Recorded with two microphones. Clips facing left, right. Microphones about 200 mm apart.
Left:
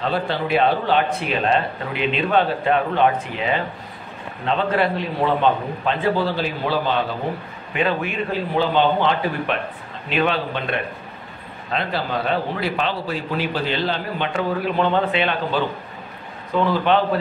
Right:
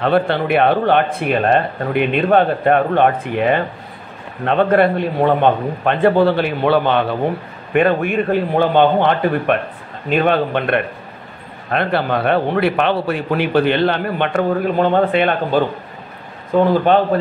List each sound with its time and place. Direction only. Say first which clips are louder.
0.0 s a man's voice: right 7 dB; 60° right (ahead or behind)